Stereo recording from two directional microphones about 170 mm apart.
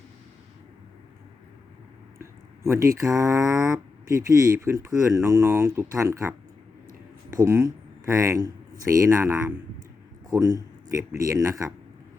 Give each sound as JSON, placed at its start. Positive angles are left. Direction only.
{"t": 2.6, "sound": "speech", "side_deg": -15}